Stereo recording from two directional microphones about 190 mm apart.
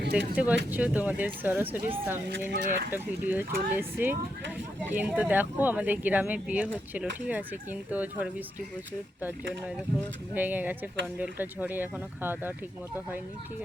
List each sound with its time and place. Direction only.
0.3 s speech: 5° right (ahead or behind)
2.2 s speech: 60° right (ahead or behind)
2.9 s speech: 10° right (ahead or behind)
10.3 s speech: 10° right (ahead or behind)